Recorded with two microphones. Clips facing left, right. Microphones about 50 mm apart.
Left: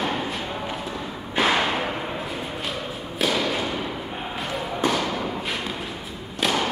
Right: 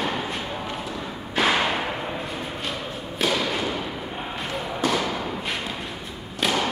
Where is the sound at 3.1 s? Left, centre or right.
Centre.